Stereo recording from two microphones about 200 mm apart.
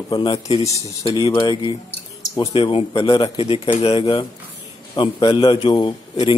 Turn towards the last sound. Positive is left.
turn(degrees=20)  # may be behind; listen again after turning